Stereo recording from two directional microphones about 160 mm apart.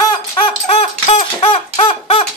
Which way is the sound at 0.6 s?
40° left (ahead or behind).